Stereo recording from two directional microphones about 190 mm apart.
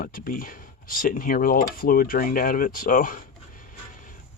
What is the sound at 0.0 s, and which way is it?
Speech, 50° left (ahead or behind).